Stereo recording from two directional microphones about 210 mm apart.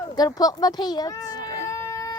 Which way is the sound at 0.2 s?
20° left (ahead or behind).